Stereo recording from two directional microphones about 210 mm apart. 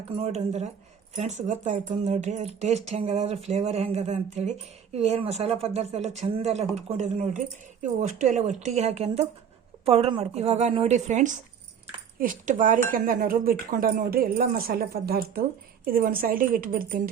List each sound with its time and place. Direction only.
0.2 s speech: 30° right (ahead or behind)